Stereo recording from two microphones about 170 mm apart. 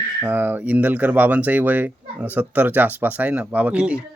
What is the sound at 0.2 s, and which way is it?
Speech, 10° right (ahead or behind).